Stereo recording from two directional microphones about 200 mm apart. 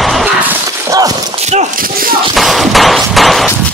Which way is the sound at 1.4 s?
35° right (ahead or behind).